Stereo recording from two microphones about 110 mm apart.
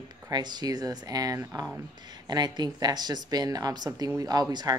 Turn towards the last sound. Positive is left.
turn(degrees=-35)  # may be behind; listen again after turning